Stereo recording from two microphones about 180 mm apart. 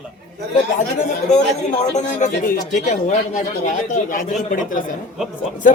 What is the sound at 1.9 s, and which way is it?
Speech, 45° left (ahead or behind).